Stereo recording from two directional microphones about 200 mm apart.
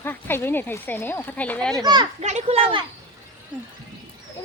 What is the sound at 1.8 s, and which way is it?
Speech, 20° right (ahead or behind).